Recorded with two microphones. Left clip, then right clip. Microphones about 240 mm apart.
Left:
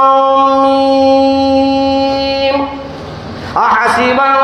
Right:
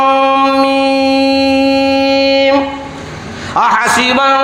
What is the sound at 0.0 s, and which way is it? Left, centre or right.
Music, right.